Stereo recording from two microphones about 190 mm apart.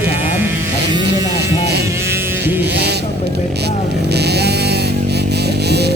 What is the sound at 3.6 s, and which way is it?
Music, 60° right (ahead or behind).